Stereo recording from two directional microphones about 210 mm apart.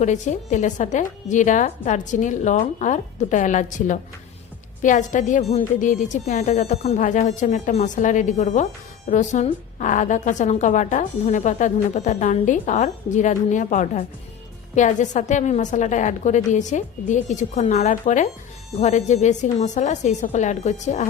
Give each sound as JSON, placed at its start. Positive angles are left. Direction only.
{"t": 0.0, "sound": "a woman's voice", "side_deg": 35}